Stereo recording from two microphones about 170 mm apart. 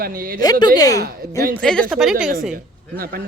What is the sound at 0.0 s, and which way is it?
Speech, 60° right (ahead or behind).